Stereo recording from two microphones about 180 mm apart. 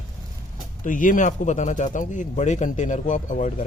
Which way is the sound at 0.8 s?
45° left (ahead or behind).